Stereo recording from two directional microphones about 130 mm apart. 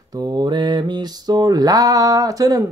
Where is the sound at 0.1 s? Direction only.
30° right (ahead or behind).